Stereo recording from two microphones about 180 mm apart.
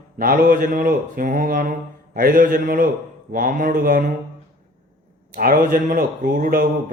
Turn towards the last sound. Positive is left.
turn(degrees=-50)  # may be behind; listen again after turning